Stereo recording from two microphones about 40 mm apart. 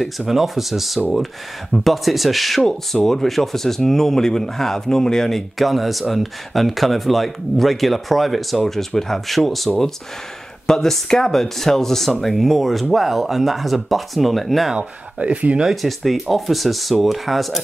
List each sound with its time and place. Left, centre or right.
0.3 s speech: centre
5.6 s speech: centre
10.7 s speech: centre
14.8 s speech: right
15.7 s speech: centre